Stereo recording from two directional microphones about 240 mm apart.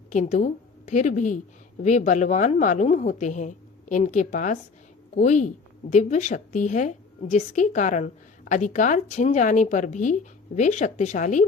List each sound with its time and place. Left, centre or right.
0.1 s a woman's voice: left